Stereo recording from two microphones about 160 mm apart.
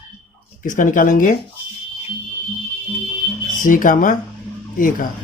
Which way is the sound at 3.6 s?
55° left (ahead or behind).